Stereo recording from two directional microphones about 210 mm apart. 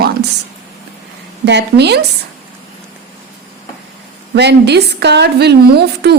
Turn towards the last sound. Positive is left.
turn(degrees=-50)  # may be behind; listen again after turning